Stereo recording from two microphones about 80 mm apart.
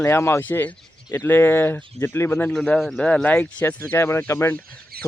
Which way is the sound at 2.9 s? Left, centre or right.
Centre.